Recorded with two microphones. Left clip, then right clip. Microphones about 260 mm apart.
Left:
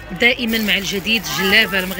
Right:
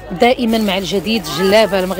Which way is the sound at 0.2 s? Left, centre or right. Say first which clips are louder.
Right 3 dB; centre.